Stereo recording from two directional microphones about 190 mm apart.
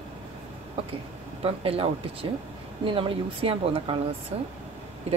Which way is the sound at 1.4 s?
30° right (ahead or behind).